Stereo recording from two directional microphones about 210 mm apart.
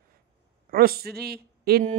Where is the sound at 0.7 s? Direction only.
45° right (ahead or behind).